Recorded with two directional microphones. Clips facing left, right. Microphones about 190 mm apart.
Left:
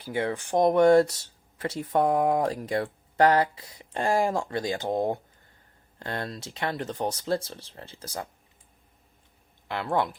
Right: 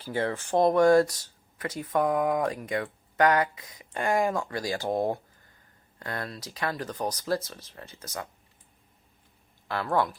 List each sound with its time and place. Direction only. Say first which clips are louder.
0.0 s speech: left 1 dB; 15° left (ahead or behind); by 8.3 s 30° left (ahead or behind)
9.6 s speech: even; 20° left (ahead or behind)